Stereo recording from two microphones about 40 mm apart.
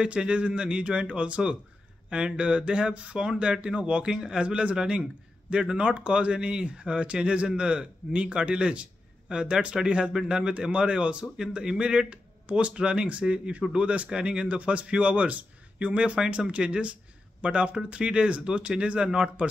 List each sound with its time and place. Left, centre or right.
0.0 s speech: right
5.8 s speech: right